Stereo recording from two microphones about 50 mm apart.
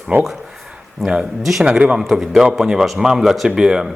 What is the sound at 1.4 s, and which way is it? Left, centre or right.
Speech, centre.